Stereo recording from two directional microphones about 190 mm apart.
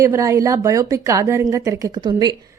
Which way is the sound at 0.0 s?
15° right (ahead or behind).